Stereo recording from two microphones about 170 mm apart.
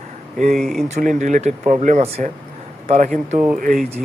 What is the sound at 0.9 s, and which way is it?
Speech, 45° right (ahead or behind).